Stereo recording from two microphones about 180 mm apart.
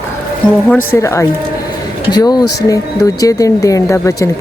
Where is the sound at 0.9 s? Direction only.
15° left (ahead or behind).